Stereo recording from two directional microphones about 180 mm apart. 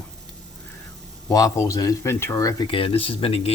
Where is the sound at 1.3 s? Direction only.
20° left (ahead or behind).